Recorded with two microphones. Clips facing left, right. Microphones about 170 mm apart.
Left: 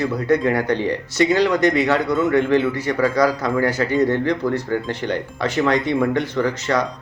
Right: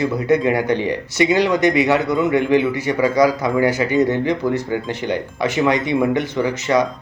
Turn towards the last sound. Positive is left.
turn(degrees=-15)  # may be behind; listen again after turning